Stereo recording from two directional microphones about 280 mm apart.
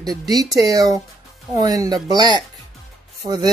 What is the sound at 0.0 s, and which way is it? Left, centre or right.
Speech, centre.